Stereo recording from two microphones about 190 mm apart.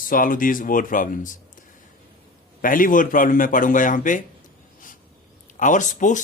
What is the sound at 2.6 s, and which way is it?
Speech, 45° left (ahead or behind).